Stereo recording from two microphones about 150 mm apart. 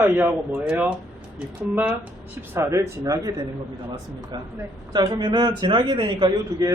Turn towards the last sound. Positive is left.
turn(degrees=-30)  # may be behind; listen again after turning